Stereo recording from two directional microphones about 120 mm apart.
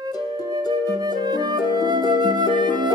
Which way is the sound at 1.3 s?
35° right (ahead or behind).